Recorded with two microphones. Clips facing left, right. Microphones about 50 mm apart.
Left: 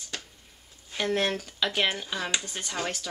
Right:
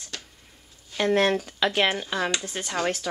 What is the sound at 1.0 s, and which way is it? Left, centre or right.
Speech, centre.